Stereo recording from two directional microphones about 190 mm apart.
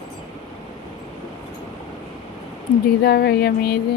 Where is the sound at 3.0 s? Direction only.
60° left (ahead or behind).